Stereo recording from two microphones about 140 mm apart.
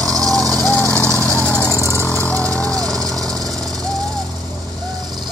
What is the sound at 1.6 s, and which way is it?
Vehicle, 20° left (ahead or behind).